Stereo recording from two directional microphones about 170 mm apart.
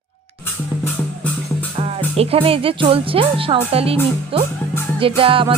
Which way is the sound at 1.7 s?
35° right (ahead or behind).